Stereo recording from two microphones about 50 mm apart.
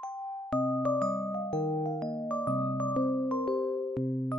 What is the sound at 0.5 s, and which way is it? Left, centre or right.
Music, left.